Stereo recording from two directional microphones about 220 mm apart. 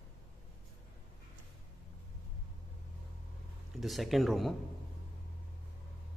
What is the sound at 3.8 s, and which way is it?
Speech, centre (ahead or behind).